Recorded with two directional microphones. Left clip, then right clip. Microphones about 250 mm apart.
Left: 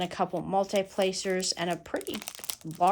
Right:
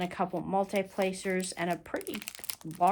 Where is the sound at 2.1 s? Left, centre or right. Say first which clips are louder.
Left 3 dB; centre.